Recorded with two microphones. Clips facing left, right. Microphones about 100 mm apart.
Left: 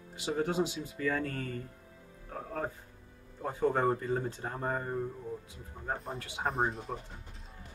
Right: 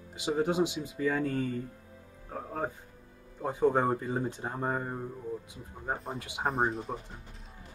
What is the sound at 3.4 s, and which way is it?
Speech, 15° right (ahead or behind).